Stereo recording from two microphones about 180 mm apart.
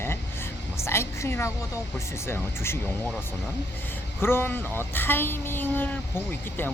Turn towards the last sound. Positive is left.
turn(degrees=10)  # may be behind; listen again after turning